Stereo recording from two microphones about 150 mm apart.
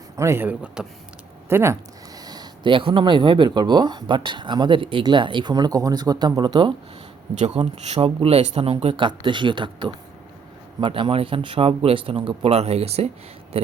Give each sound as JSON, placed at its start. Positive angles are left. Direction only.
{"t": 0.2, "sound": "speech", "side_deg": -15}
{"t": 7.3, "sound": "a man's voice", "side_deg": -45}